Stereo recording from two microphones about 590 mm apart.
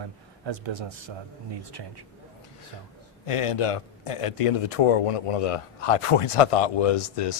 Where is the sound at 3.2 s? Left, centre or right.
Left.